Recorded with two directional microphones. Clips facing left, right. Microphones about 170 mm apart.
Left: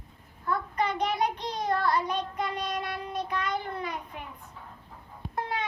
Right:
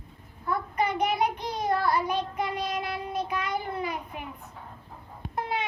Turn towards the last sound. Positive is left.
turn(degrees=-15)  # may be behind; listen again after turning